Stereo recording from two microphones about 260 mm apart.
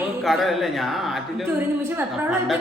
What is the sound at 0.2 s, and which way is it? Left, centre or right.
A woman's voice, centre.